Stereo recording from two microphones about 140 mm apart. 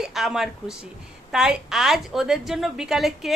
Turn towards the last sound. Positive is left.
turn(degrees=0)  # may be behind; listen again after turning